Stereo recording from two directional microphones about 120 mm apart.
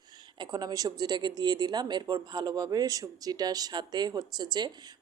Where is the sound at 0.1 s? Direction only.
35° right (ahead or behind).